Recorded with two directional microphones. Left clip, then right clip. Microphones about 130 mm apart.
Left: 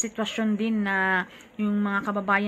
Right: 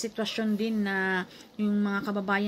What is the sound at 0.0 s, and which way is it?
Speech, 25° left (ahead or behind).